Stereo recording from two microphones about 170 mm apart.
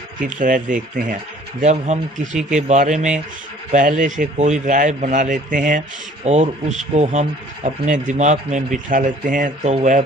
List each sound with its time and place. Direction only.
0.3 s speech: 50° right (ahead or behind)